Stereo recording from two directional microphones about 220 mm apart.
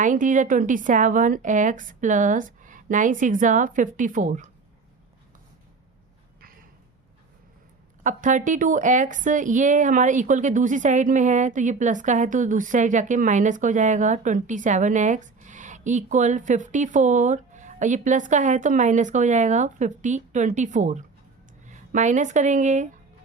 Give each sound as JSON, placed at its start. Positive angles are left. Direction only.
{"t": 0.0, "sound": "speech", "side_deg": -35}
{"t": 6.4, "sound": "a sound", "side_deg": -40}
{"t": 8.0, "sound": "speech", "side_deg": -35}